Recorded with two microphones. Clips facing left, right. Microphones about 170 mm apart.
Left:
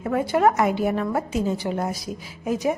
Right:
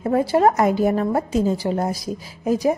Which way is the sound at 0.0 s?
35° right (ahead or behind).